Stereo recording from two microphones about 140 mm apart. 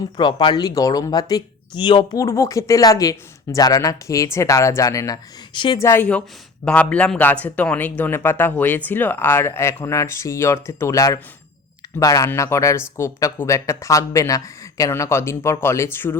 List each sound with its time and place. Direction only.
0.2 s speech: 35° left (ahead or behind)
5.8 s speech: 15° left (ahead or behind)